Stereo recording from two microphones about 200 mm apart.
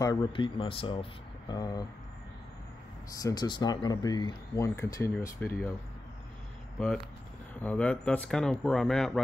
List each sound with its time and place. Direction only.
0.0 s speech: 25° left (ahead or behind)
3.1 s speech: 15° left (ahead or behind)
7.6 s speech: 5° left (ahead or behind)